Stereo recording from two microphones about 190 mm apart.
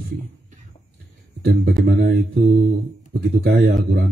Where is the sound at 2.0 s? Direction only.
70° right (ahead or behind).